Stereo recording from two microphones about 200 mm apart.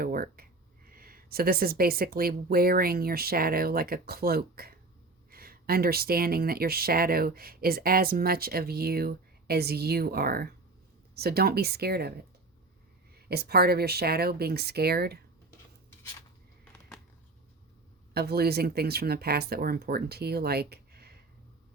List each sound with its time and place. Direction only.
0.0 s speech: 50° right (ahead or behind)
13.2 s speech: 50° right (ahead or behind)
18.1 s speech: 50° right (ahead or behind)